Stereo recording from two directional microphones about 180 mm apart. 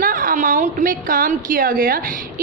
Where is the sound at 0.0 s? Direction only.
50° right (ahead or behind).